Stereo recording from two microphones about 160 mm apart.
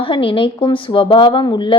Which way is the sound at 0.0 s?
35° left (ahead or behind).